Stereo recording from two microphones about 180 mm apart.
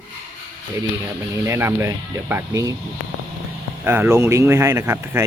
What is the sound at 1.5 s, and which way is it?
Speech, 15° right (ahead or behind).